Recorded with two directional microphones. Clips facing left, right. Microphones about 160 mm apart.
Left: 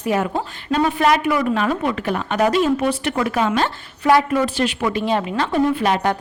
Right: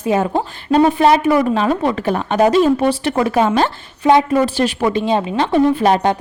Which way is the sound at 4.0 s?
20° right (ahead or behind).